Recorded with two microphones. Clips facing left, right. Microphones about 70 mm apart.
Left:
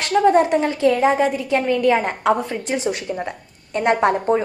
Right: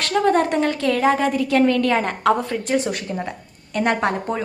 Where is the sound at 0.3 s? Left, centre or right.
Centre.